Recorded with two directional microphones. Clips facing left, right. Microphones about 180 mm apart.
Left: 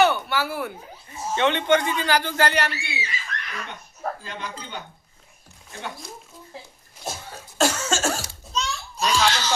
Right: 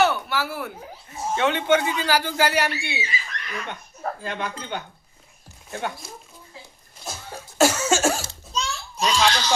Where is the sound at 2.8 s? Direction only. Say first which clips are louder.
Right 3 dB; 25° right (ahead or behind).